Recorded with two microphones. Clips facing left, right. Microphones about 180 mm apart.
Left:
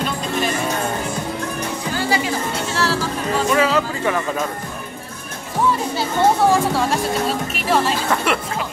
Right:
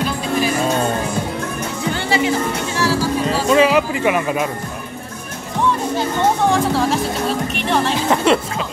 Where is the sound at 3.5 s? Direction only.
15° right (ahead or behind).